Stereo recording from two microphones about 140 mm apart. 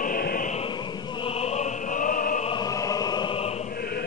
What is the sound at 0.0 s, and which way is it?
Opera, 90° left.